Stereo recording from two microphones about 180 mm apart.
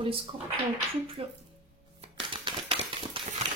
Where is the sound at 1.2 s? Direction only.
30° right (ahead or behind).